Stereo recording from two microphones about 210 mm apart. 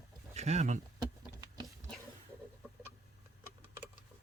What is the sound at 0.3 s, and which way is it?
Speech, 30° right (ahead or behind).